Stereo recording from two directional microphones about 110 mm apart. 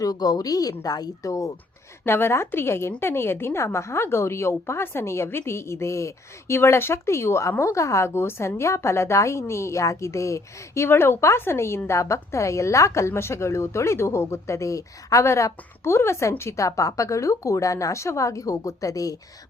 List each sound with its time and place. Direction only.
0.0 s a woman's voice: 35° left (ahead or behind)